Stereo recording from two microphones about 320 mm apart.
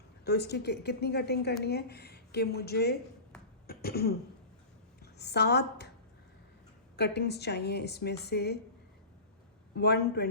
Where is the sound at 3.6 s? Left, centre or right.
Left.